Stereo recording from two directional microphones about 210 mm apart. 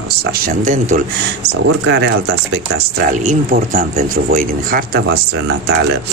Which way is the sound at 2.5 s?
45° right (ahead or behind).